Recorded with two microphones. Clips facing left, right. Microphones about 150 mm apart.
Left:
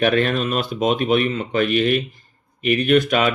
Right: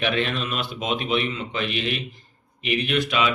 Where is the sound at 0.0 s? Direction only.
45° left (ahead or behind).